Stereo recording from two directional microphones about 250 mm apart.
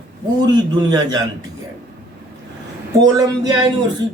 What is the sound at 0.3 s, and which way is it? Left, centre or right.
Speech, centre.